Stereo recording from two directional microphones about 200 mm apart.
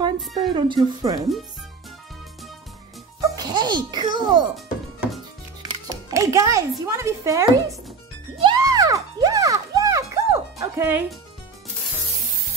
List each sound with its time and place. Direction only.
0.0 s speech: 25° right (ahead or behind)
3.2 s a child's voice: 20° right (ahead or behind)
5.6 s music: 20° right (ahead or behind)
6.9 s speech: 15° right (ahead or behind)
8.4 s music: 20° right (ahead or behind)